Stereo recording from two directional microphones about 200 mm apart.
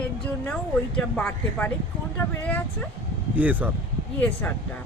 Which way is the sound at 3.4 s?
10° right (ahead or behind).